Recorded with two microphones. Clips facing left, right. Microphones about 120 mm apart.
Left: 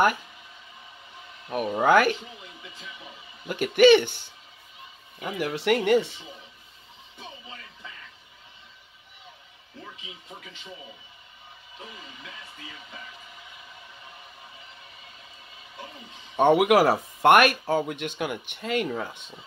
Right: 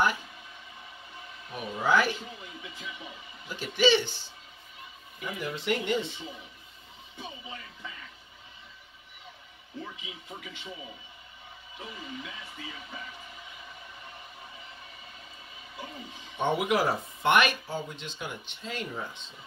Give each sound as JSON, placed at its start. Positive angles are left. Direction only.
{"t": 1.5, "sound": "speech", "side_deg": 60}
{"t": 3.4, "sound": "speech", "side_deg": 60}
{"t": 5.2, "sound": "speech", "side_deg": 75}
{"t": 7.2, "sound": "speech", "side_deg": -5}
{"t": 16.3, "sound": "speech", "side_deg": 60}